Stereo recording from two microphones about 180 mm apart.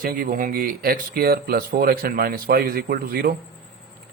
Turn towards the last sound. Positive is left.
turn(degrees=-55)  # may be behind; listen again after turning